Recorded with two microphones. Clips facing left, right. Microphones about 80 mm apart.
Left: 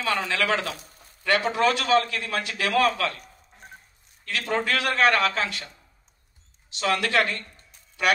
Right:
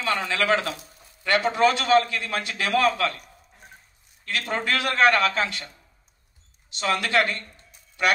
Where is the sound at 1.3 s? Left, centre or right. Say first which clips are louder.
Right 3 dB; right.